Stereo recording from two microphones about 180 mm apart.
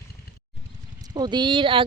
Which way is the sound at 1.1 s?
25° right (ahead or behind).